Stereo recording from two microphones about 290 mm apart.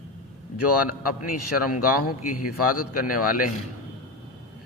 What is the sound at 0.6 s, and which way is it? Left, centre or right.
Mantra, left.